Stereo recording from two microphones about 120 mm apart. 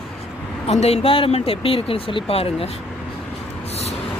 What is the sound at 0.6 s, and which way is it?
Speech, 60° left (ahead or behind).